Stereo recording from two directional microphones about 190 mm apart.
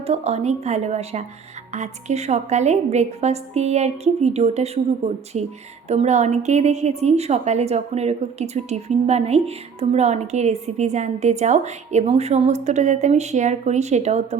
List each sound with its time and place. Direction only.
0.0 s a woman's voice: 35° right (ahead or behind)